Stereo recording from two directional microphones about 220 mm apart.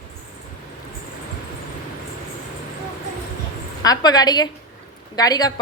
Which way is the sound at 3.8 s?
15° left (ahead or behind).